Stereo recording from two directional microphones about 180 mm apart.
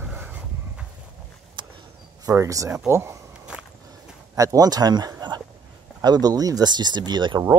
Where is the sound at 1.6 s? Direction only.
25° right (ahead or behind).